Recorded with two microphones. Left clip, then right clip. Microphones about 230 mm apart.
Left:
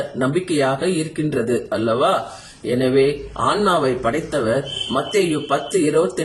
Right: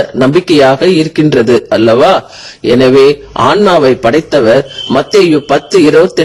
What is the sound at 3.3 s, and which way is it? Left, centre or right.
A man's voice, right.